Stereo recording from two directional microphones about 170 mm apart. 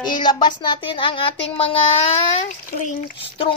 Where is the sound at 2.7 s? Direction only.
50° left (ahead or behind).